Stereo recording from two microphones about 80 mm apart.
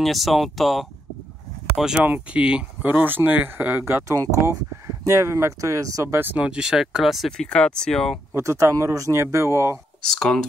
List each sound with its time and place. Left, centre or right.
0.0 s speech: centre
2.0 s speech: centre
2.9 s speech: right
4.1 s speech: right
6.3 s speech: centre
8.4 s speech: right
10.0 s speech: centre